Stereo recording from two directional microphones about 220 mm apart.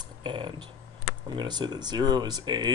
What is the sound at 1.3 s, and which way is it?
Speech, 20° right (ahead or behind).